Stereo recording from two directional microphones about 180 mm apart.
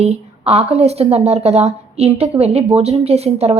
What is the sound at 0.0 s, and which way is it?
A woman's voice, 35° right (ahead or behind).